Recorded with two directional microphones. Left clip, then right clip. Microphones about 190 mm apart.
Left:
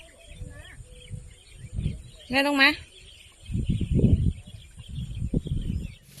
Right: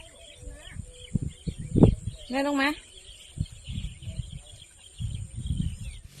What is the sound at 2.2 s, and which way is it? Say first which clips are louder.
Speech: left 6 dB; 10° left (ahead or behind).